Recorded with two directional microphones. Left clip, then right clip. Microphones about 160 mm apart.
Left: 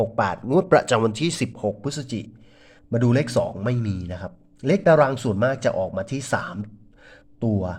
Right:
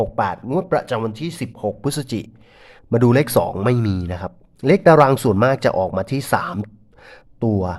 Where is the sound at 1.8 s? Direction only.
30° right (ahead or behind).